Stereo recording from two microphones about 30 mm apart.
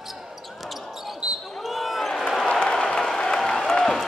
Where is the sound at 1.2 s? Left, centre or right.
Right.